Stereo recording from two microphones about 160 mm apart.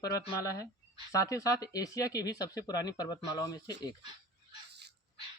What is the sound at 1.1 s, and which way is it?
Speech, 20° left (ahead or behind).